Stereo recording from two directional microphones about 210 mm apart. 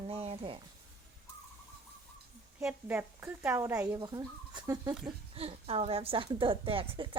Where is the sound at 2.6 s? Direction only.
10° right (ahead or behind).